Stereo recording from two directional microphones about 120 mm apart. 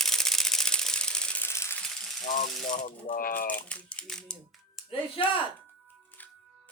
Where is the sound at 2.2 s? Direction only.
90° left.